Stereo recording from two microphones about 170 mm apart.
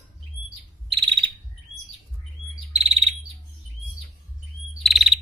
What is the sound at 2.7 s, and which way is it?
Bird, 35° right (ahead or behind).